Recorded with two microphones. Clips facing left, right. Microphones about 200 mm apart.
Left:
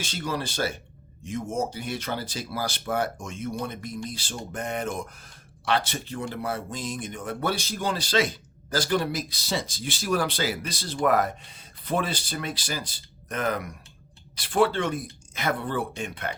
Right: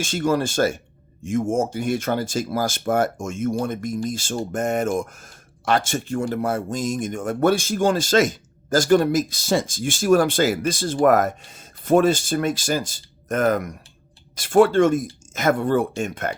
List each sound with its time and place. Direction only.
0.0 s speech: 45° right (ahead or behind)